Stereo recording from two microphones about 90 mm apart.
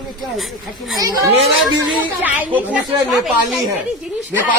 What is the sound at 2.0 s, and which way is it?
Speech, 20° right (ahead or behind).